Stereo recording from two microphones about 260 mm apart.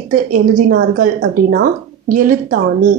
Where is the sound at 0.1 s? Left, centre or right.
Right.